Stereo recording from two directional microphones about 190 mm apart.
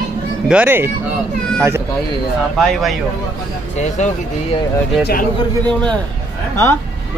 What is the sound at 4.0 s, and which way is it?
Speech, 40° left (ahead or behind).